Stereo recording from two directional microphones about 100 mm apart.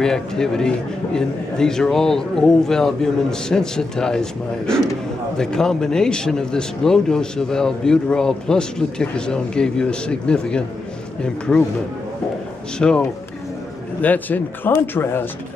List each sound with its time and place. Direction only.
0.0 s a man's voice: 5° left (ahead or behind)
12.7 s a man's voice: 10° left (ahead or behind)